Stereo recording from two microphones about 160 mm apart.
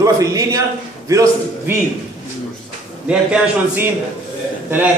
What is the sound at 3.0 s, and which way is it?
Speech, 5° right (ahead or behind).